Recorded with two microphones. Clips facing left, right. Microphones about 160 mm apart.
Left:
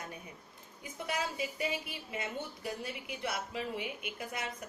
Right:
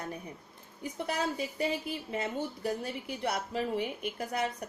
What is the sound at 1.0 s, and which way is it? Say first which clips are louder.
A woman's voice: right 3 dB; 35° right (ahead or behind).